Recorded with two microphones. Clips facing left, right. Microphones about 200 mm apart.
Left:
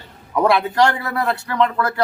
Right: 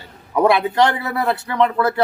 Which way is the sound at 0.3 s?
20° right (ahead or behind).